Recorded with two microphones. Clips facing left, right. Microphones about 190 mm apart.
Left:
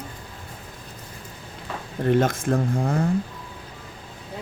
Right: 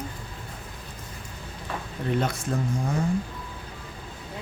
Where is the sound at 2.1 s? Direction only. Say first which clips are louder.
Left 7 dB; 45° left (ahead or behind).